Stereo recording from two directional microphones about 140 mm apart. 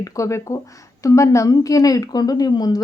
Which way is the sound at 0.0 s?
20° left (ahead or behind).